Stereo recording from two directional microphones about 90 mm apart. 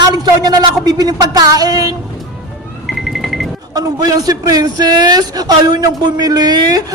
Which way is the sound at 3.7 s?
45° right (ahead or behind).